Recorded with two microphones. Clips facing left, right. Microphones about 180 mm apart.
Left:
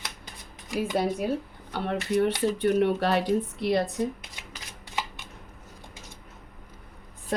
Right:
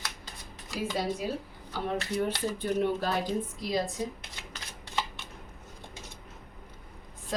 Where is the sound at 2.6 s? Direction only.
70° left (ahead or behind).